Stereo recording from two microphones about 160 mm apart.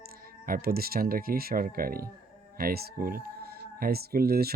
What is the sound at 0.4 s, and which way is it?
Speech, 65° right (ahead or behind).